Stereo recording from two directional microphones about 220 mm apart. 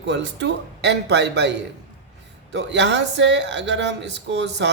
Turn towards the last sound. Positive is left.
turn(degrees=-55)  # may be behind; listen again after turning